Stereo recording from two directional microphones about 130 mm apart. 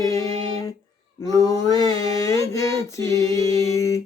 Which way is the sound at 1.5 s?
30° left (ahead or behind).